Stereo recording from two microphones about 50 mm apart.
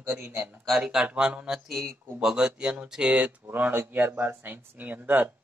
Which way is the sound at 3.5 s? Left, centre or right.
Right.